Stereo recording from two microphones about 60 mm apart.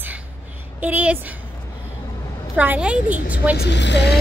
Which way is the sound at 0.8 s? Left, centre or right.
Right.